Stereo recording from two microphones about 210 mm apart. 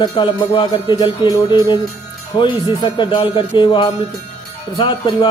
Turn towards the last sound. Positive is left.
turn(degrees=25)  # may be behind; listen again after turning